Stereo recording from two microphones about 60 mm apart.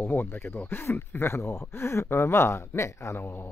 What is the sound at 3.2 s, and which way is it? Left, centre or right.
Mantra, left.